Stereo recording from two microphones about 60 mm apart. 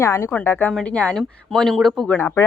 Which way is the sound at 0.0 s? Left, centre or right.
Left.